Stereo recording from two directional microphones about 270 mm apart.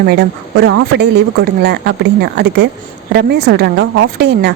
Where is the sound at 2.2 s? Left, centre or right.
Right.